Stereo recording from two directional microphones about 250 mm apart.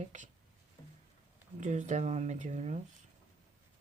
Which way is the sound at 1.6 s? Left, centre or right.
Right.